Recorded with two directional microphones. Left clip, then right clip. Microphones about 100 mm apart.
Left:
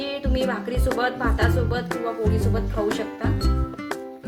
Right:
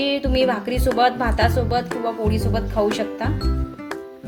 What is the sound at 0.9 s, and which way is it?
Speech, 50° right (ahead or behind).